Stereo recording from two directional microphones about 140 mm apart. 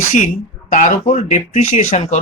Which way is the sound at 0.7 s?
60° left (ahead or behind).